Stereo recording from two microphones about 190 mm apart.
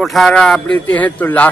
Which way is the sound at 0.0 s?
Centre (ahead or behind).